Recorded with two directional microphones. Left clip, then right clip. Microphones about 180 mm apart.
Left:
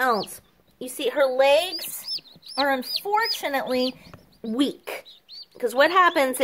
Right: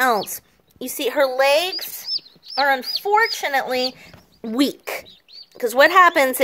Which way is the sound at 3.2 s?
20° right (ahead or behind).